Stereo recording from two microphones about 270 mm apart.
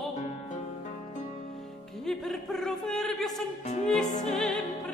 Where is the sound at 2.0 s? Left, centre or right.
Centre.